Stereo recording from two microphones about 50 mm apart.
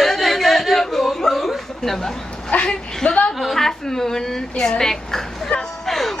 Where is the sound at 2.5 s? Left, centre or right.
Centre.